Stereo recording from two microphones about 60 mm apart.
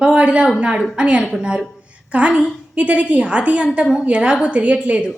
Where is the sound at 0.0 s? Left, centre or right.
Centre.